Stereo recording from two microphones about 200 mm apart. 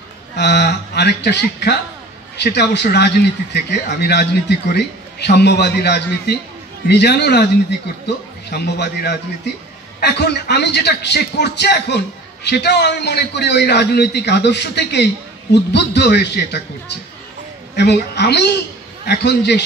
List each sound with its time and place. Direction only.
0.4 s a man's voice: 55° left (ahead or behind)
8.5 s a man's voice: 55° left (ahead or behind)
17.7 s a man's voice: 55° left (ahead or behind)